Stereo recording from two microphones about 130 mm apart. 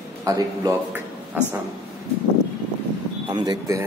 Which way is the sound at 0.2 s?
25° right (ahead or behind).